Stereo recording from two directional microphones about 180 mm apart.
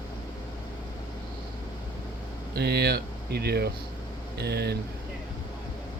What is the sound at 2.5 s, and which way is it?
Speech, 65° right (ahead or behind).